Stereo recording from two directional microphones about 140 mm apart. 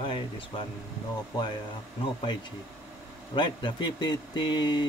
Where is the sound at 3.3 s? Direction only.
35° left (ahead or behind).